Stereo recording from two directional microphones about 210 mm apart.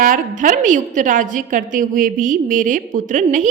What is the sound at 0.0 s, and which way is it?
A woman's voice, 40° right (ahead or behind).